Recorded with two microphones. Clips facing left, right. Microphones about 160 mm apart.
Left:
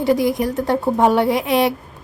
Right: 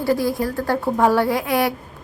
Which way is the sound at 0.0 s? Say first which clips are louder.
Left 3 dB; 20° left (ahead or behind).